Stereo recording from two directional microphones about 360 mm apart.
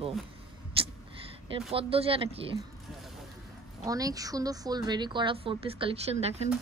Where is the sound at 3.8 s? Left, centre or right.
Centre.